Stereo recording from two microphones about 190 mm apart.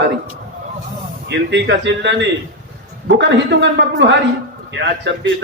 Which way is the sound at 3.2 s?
70° right (ahead or behind).